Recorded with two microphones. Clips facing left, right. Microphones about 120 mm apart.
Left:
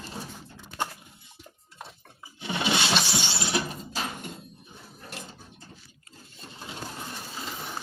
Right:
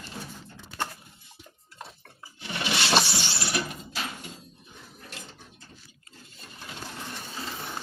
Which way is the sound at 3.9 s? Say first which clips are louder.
Left 2 dB; 40° left (ahead or behind).